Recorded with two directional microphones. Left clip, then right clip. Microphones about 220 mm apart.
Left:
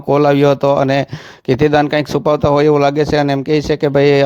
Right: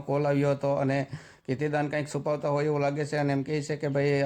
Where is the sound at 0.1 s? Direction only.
35° left (ahead or behind).